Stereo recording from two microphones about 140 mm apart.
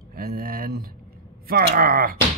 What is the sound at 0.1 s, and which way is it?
Speech, 90° right.